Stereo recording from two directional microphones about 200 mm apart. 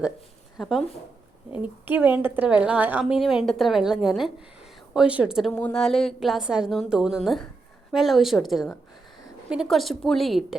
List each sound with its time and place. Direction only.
0.5 s a woman's voice: centre (ahead or behind)